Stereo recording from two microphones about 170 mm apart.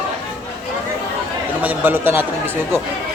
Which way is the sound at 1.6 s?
10° right (ahead or behind).